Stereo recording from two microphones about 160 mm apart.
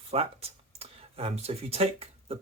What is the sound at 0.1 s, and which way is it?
Speech, 40° right (ahead or behind).